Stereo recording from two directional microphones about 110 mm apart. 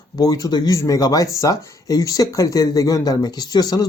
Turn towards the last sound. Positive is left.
turn(degrees=35)  # may be behind; listen again after turning